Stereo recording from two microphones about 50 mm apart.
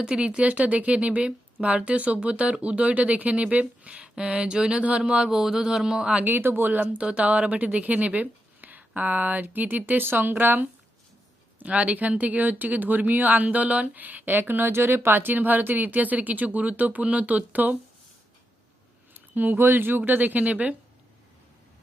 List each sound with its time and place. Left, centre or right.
0.0 s speech: centre
6.2 s speech: right
6.7 s speech: right
11.6 s speech: right
14.7 s speech: right
19.1 s speech: right